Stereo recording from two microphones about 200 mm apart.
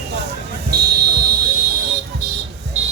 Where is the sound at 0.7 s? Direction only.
50° right (ahead or behind).